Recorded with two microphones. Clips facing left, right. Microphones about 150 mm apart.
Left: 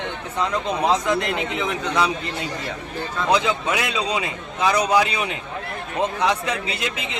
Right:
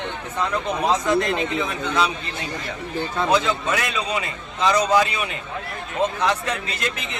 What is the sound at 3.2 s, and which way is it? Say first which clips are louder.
Speech: left 2 dB; 15° left (ahead or behind).